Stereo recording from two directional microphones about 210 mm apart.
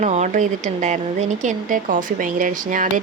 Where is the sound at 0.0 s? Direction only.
35° right (ahead or behind).